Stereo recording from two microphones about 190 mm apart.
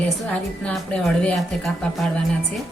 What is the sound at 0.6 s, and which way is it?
Speech, 5° left (ahead or behind).